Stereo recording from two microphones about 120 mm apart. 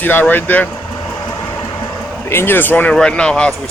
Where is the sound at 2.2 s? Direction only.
20° left (ahead or behind).